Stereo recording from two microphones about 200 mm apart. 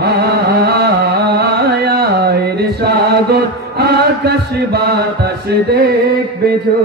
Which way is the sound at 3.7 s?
55° right (ahead or behind).